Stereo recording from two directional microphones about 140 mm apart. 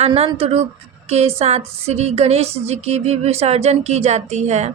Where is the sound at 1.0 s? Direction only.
50° right (ahead or behind).